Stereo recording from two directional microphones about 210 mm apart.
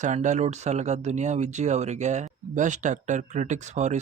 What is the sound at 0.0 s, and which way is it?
Speech, 35° right (ahead or behind).